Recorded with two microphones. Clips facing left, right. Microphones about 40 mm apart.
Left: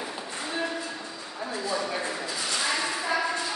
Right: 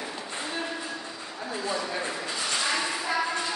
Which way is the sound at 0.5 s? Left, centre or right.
Centre.